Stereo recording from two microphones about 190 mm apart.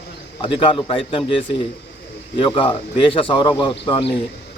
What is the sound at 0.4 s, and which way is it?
Speech, 25° left (ahead or behind).